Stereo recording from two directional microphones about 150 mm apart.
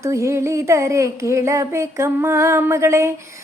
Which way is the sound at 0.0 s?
20° right (ahead or behind).